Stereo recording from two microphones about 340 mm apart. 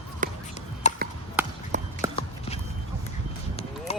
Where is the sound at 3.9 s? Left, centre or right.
Centre.